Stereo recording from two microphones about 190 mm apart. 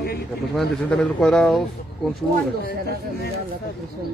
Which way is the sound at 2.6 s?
55° left (ahead or behind).